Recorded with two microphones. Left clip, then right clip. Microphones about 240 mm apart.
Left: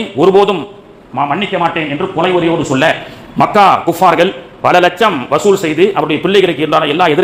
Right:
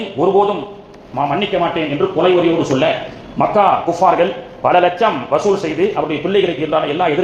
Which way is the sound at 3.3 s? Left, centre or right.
Left.